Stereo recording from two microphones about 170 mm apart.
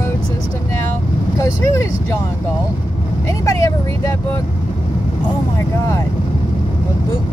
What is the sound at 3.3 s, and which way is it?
Speech, 20° left (ahead or behind).